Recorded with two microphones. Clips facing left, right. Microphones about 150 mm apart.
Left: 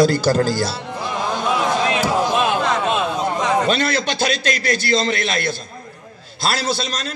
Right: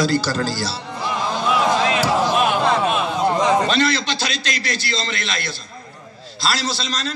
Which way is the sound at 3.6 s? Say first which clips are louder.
Even; 50° left (ahead or behind).